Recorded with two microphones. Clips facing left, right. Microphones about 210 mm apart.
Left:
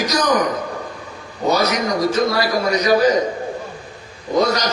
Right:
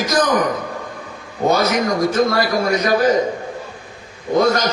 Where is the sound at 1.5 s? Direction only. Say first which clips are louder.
Right 1 dB; 50° right (ahead or behind).